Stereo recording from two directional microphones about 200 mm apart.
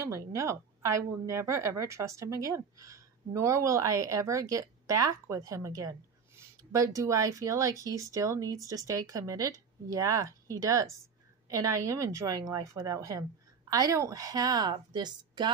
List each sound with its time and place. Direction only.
0.0 s a woman's voice: 15° right (ahead or behind)